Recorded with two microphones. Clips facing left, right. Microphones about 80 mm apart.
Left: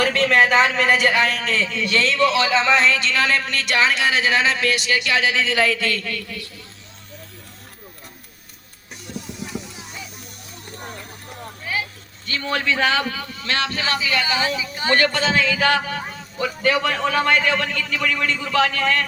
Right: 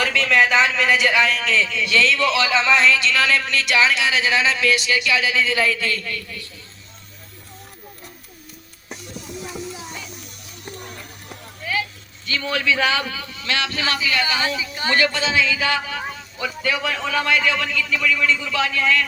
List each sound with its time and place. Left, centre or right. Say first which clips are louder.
0.0 s a man's voice: left 1 dB; left
12.2 s a man's voice: even; left; by 14.9 s centre
14.9 s a man's voice: left 1 dB; left